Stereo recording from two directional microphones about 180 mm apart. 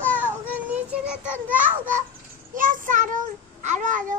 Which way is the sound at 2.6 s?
45° right (ahead or behind).